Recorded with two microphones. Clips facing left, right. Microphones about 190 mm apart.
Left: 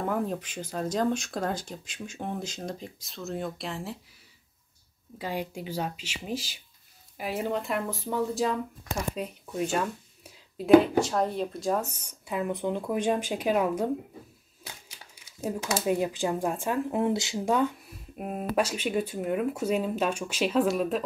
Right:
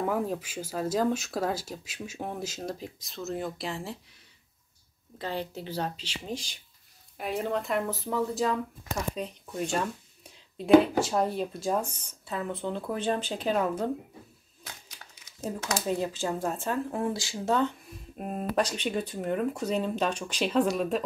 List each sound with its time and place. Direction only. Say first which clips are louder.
0.0 s speech: even; 5° right (ahead or behind)
5.2 s speech: left 1 dB; 10° left (ahead or behind)
9.1 s a sound: left 1 dB; 5° left (ahead or behind)
11.1 s speech: even; 5° right (ahead or behind)
11.9 s speech: left 2 dB; 10° left (ahead or behind)
17.6 s speech: left 1 dB; 5° left (ahead or behind)